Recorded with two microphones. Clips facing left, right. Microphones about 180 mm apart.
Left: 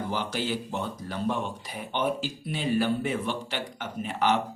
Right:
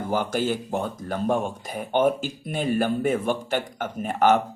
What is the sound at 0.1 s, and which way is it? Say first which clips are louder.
Speech: right 9 dB; 50° right (ahead or behind).